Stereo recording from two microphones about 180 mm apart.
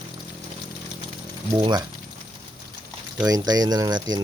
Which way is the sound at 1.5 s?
25° right (ahead or behind).